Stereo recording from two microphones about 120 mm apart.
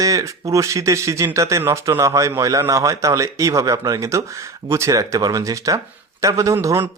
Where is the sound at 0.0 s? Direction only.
30° right (ahead or behind).